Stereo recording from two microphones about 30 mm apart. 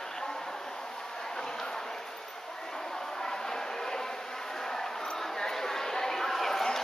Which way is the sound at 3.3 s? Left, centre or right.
Centre.